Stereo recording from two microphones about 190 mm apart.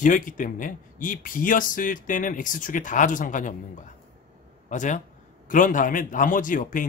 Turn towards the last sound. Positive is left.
turn(degrees=45)  # may be behind; listen again after turning